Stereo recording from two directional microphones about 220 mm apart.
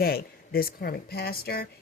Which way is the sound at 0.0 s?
45° left (ahead or behind).